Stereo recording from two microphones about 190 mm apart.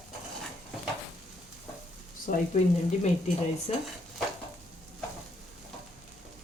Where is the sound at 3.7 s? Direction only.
35° left (ahead or behind).